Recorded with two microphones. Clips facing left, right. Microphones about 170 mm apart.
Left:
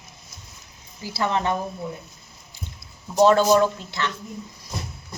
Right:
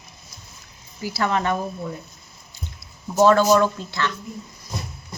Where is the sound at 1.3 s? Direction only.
20° left (ahead or behind).